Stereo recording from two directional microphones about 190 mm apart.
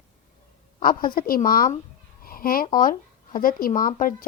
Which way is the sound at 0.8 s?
50° left (ahead or behind).